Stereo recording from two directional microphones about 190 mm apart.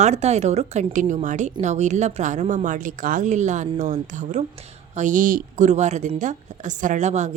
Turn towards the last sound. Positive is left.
turn(degrees=-35)  # may be behind; listen again after turning